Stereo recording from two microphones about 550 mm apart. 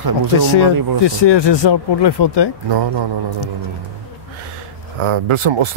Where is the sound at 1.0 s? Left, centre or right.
Left.